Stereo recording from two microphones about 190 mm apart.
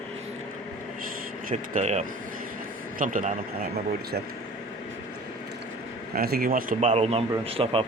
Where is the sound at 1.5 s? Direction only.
40° right (ahead or behind).